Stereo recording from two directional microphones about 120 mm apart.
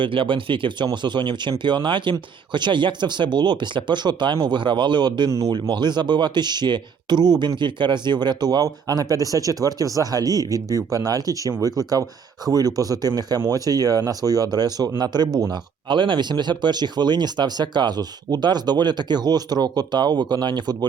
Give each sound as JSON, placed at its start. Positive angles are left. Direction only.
{"t": 0.0, "sound": "speech", "side_deg": -45}